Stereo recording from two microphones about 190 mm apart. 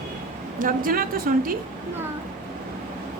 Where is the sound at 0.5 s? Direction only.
45° right (ahead or behind).